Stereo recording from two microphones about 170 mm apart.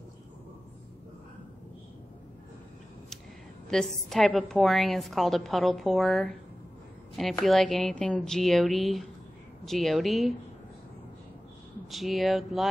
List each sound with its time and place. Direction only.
3.6 s a woman's voice: centre (ahead or behind)
11.9 s a woman's voice: centre (ahead or behind)